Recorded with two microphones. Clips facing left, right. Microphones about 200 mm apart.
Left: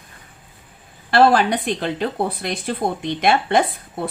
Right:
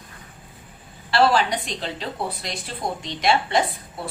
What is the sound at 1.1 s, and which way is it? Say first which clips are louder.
Speech: left 4 dB; 55° left (ahead or behind).